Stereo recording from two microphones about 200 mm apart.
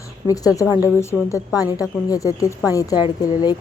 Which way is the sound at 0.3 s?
15° left (ahead or behind).